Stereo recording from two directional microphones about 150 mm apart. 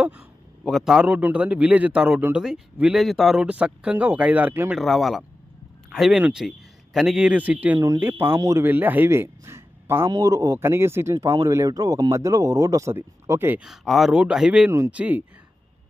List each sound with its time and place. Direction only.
0.7 s a man's voice: centre (ahead or behind)
4.7 s a man's voice: centre (ahead or behind)
13.7 s a man's voice: centre (ahead or behind)